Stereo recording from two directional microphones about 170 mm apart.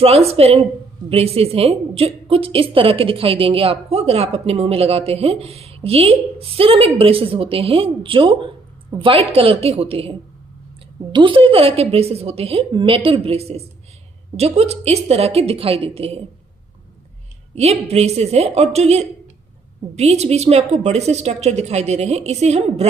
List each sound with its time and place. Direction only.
0.3 s a woman's voice: 35° right (ahead or behind)
17.6 s a woman's voice: 40° right (ahead or behind)